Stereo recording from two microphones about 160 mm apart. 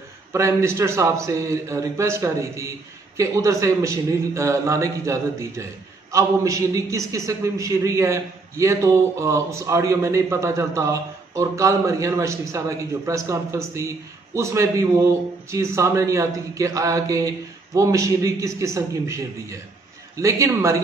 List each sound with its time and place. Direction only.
0.3 s a man's voice: 15° right (ahead or behind)